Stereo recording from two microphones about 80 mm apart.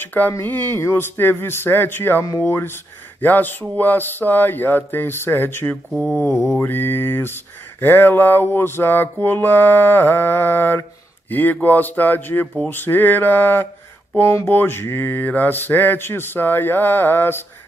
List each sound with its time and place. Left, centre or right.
0.0 s speech: left
6.3 s mantra: centre
6.6 s speech: left